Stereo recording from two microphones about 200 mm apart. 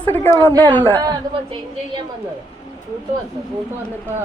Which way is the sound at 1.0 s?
25° right (ahead or behind).